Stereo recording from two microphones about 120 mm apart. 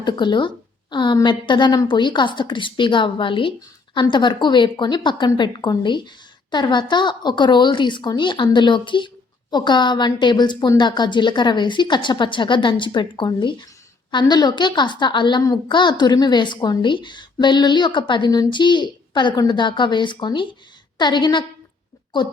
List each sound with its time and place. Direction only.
0.0 s a woman's voice: 40° left (ahead or behind)